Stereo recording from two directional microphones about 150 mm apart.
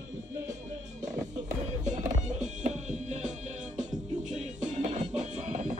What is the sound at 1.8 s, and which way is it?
Music, 55° right (ahead or behind).